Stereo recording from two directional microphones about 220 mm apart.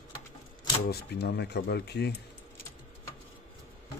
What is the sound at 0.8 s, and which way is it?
Speech, 45° left (ahead or behind).